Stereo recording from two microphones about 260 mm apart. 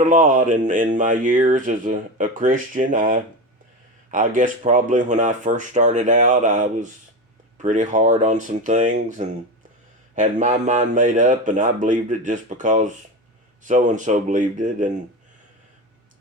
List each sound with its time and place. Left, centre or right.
0.0 s speech: right